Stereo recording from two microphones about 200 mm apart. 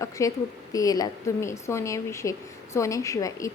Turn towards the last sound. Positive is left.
turn(degrees=15)  # may be behind; listen again after turning